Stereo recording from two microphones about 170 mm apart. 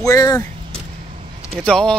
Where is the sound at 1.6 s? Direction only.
5° left (ahead or behind).